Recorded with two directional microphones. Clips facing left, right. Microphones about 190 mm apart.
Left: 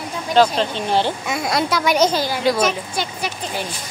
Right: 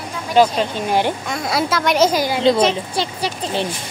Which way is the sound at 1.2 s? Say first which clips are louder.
Even; centre (ahead or behind).